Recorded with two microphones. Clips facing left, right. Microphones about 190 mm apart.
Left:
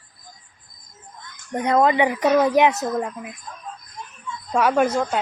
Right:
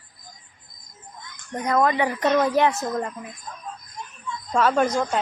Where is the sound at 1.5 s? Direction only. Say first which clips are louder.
Left 3 dB; 25° left (ahead or behind); by 3.3 s 5° left (ahead or behind).